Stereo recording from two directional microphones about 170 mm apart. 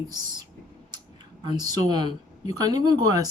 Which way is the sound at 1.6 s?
25° right (ahead or behind).